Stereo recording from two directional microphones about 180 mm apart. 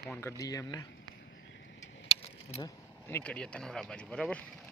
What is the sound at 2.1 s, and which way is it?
Keys jangling, 30° left (ahead or behind).